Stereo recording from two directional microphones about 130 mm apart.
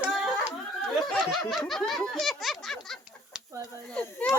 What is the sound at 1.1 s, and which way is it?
Snicker, centre (ahead or behind).